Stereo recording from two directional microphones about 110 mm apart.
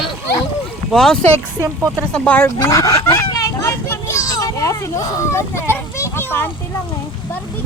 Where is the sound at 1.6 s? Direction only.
25° right (ahead or behind).